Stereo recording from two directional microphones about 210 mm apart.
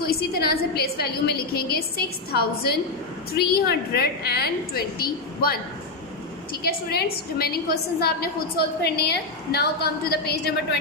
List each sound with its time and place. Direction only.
0.0 s a woman's voice: 45° left (ahead or behind)
6.7 s a woman's voice: 50° left (ahead or behind)